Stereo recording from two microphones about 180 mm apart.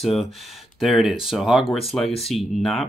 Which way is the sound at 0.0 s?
Centre (ahead or behind).